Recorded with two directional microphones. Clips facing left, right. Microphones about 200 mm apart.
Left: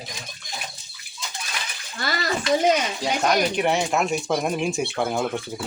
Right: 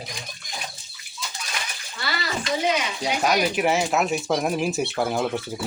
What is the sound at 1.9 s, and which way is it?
Speech, 45° left (ahead or behind).